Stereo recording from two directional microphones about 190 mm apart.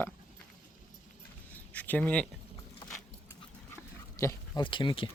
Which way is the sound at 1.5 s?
10° left (ahead or behind).